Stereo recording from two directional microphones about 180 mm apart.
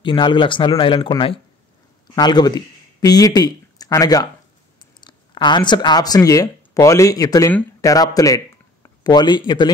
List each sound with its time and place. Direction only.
0.0 s speech: 25° left (ahead or behind)